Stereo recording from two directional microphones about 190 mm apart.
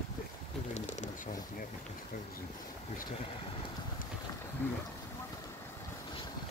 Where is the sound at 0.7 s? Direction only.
40° left (ahead or behind).